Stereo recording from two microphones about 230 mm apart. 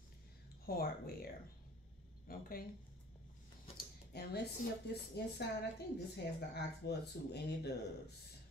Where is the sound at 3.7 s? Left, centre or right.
Left.